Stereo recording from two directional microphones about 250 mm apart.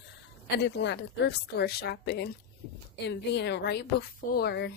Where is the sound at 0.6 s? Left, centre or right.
Left.